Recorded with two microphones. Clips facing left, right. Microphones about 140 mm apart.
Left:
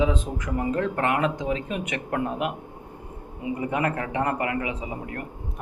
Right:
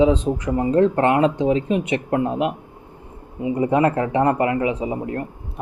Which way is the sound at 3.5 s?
25° right (ahead or behind).